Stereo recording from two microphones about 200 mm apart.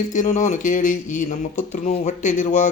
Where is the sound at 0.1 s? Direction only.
40° left (ahead or behind).